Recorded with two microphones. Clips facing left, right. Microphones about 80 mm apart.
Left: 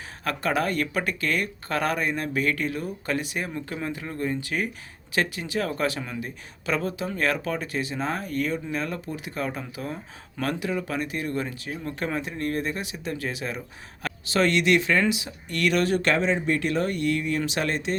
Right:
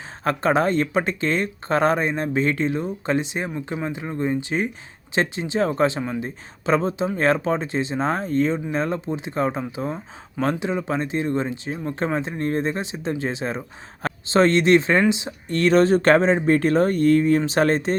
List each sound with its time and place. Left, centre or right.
0.3 s speech: right